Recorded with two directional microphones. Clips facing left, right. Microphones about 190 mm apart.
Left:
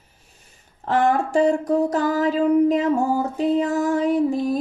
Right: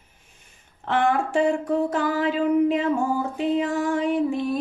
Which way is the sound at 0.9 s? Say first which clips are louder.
Left 3 dB; 40° left (ahead or behind).